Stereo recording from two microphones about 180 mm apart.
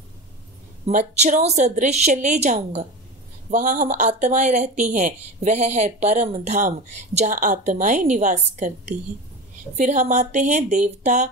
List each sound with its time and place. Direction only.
0.8 s a woman's voice: 40° right (ahead or behind)